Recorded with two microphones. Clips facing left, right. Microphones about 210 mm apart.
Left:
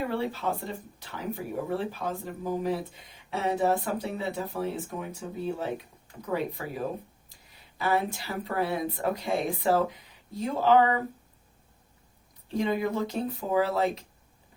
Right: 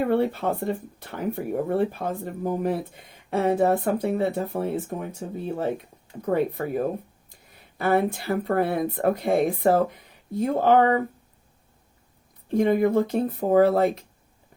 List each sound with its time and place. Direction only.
0.0 s speech: 55° right (ahead or behind)
12.5 s speech: 55° right (ahead or behind)